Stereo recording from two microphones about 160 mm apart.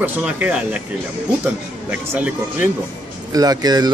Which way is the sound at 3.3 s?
25° right (ahead or behind).